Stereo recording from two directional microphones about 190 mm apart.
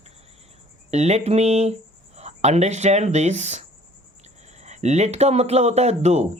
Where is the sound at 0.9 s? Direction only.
35° right (ahead or behind).